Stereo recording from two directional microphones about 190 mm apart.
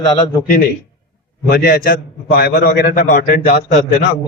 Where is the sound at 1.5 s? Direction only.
55° left (ahead or behind).